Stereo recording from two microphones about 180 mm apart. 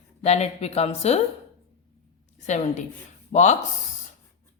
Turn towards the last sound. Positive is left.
turn(degrees=40)  # may be behind; listen again after turning